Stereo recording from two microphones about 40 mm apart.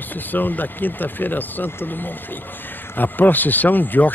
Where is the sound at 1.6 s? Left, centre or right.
Left.